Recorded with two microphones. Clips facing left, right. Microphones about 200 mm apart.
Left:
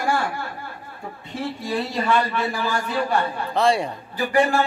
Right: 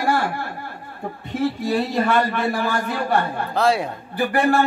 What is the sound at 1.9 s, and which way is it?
A man's voice, 55° right (ahead or behind).